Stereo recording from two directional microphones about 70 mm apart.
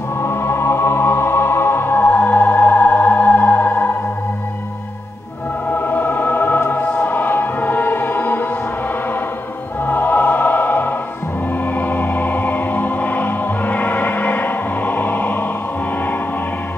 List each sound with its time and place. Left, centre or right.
0.2 s music: left
5.7 s music: left
9.8 s music: left